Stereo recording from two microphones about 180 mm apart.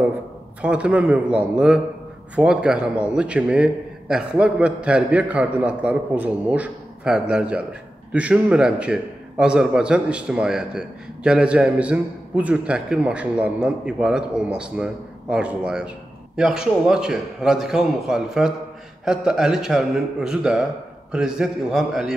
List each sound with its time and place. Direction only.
0.6 s a man's voice: 5° right (ahead or behind)